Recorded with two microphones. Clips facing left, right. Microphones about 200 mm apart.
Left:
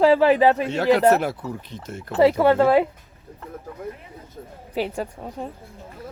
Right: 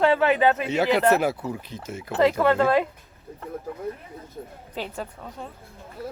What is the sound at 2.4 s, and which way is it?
Speech, 25° left (ahead or behind).